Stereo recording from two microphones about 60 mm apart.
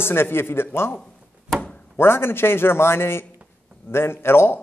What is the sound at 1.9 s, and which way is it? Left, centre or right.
A man's voice, left.